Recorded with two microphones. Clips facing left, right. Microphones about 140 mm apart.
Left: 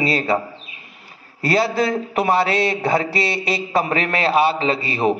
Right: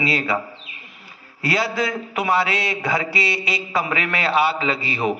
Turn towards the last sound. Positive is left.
turn(degrees=40)  # may be behind; listen again after turning